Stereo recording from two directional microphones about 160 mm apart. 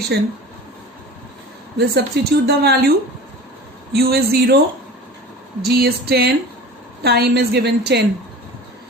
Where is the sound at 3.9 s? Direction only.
80° right.